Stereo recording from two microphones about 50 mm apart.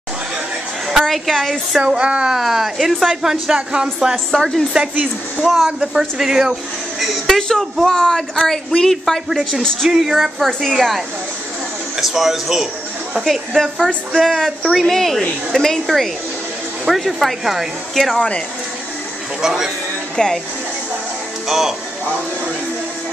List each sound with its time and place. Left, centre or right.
0.8 s a woman's voice: centre
1.8 s speech: centre
2.3 s speech: centre
4.3 s a man's voice: centre
5.4 s speech: centre
7.0 s a man's voice: centre
9.6 s a man's voice: centre
9.8 s speech: centre
12.0 s speech: centre
13.6 s speech: centre
19.4 s speech: centre
20.2 s a man's voice: centre
21.5 s speech: centre